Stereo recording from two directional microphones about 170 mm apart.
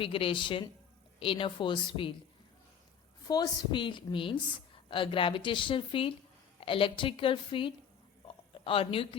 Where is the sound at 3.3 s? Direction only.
25° left (ahead or behind).